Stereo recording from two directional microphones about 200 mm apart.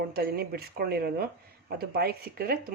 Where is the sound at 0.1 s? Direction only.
50° right (ahead or behind).